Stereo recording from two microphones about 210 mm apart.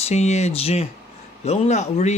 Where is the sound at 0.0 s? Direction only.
30° left (ahead or behind).